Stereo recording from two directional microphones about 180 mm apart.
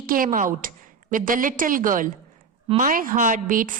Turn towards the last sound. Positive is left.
turn(degrees=-45)  # may be behind; listen again after turning